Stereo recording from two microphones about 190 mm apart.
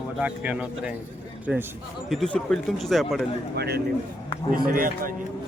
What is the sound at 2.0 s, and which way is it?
Speech, centre (ahead or behind).